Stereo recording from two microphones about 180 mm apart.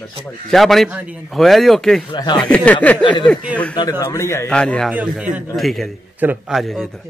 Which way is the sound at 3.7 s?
25° left (ahead or behind).